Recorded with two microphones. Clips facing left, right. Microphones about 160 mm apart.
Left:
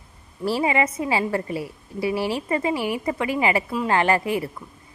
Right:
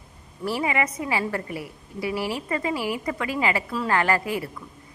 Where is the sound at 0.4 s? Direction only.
25° left (ahead or behind).